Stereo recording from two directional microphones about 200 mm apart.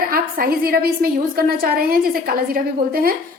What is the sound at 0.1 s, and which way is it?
A woman's voice, 50° right (ahead or behind).